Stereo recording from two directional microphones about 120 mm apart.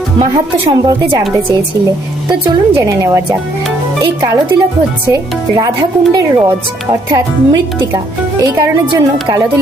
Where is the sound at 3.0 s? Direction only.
30° right (ahead or behind).